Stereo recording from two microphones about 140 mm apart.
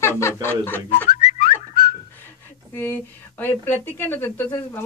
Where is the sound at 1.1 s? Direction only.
50° left (ahead or behind).